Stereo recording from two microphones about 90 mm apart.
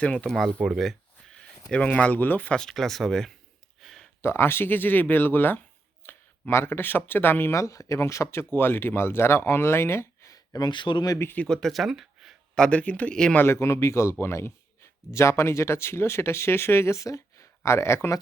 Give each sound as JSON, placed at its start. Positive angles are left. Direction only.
{"t": 0.0, "sound": "speech", "side_deg": 15}
{"t": 0.3, "sound": "speech", "side_deg": 0}
{"t": 1.7, "sound": "speech", "side_deg": 15}
{"t": 2.6, "sound": "speech", "side_deg": 5}
{"t": 3.8, "sound": "a sound", "side_deg": 0}
{"t": 4.2, "sound": "speech", "side_deg": 25}
{"t": 10.3, "sound": "a sound", "side_deg": 45}
{"t": 10.7, "sound": "speech", "side_deg": 60}
{"t": 11.3, "sound": "speech", "side_deg": 5}
{"t": 12.5, "sound": "speech", "side_deg": 10}
{"t": 13.3, "sound": "a man's voice", "side_deg": 25}